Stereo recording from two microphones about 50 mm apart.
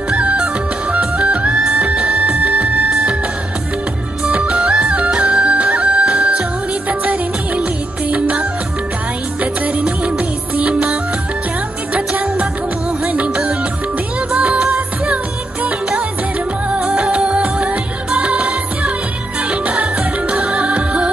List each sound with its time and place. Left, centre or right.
0.9 s music: right
4.4 s music: centre
14.4 s music: right
16.7 s music: right